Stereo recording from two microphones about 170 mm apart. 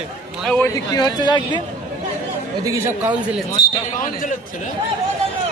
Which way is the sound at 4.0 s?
50° left (ahead or behind).